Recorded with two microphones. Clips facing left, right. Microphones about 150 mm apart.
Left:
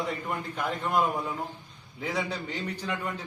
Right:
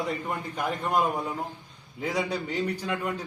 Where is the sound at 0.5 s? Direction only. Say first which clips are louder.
Right 2 dB; 10° right (ahead or behind).